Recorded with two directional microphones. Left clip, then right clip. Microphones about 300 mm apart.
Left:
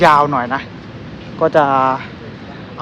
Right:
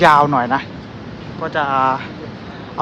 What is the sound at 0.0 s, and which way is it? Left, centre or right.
Speech, centre.